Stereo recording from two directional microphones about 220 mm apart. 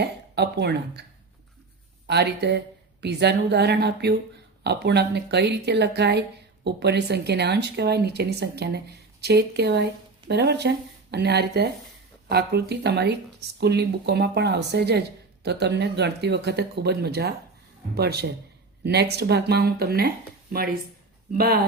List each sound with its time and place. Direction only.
0.0 s speech: 50° right (ahead or behind)
2.0 s speech: 50° right (ahead or behind)